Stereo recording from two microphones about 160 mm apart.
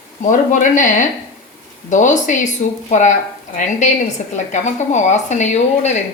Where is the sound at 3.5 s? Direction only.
50° left (ahead or behind).